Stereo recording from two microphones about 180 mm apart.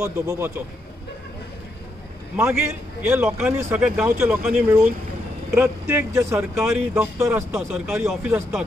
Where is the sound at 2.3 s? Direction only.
15° right (ahead or behind).